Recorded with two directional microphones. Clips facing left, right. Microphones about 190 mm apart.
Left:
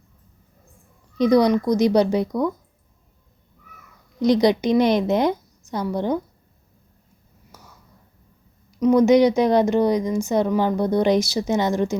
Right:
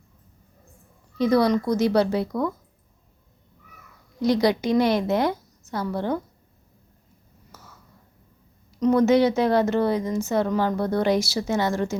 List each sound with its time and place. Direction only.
1.2 s speech: 15° left (ahead or behind)
4.2 s a woman's voice: 20° left (ahead or behind)
7.5 s a sound: 15° left (ahead or behind)
8.7 s speech: 15° left (ahead or behind)